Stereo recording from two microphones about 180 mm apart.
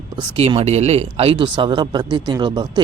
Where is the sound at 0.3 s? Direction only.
35° right (ahead or behind).